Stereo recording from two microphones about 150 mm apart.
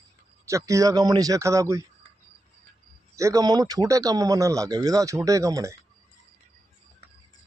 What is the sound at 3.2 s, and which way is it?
A man's voice, 20° right (ahead or behind).